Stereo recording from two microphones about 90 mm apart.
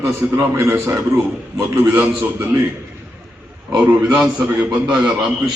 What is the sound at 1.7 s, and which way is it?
Speech, 20° right (ahead or behind).